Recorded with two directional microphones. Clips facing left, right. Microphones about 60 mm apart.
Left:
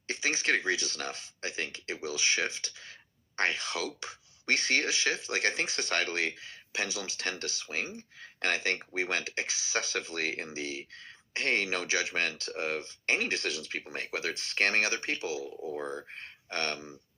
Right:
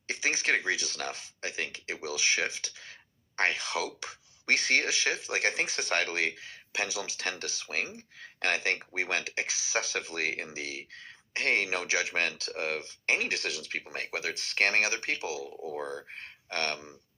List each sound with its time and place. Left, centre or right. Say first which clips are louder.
0.1 s speech: right 1 dB; right
8.4 s speech: right 1 dB; centre
15.8 s speech: right 2 dB; centre